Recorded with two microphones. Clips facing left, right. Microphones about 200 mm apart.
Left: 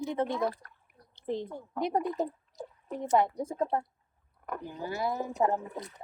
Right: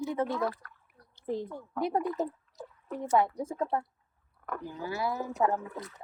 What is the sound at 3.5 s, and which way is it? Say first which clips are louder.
Speech: left 1 dB; 20° left (ahead or behind).